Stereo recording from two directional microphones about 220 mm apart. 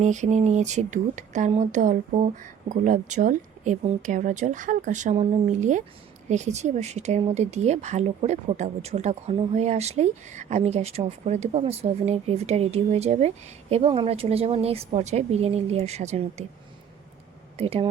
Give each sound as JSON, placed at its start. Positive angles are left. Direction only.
{"t": 0.0, "sound": "speech", "side_deg": -35}
{"t": 17.6, "sound": "speech", "side_deg": -25}